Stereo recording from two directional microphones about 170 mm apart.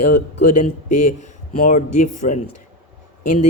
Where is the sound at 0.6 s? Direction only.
45° left (ahead or behind).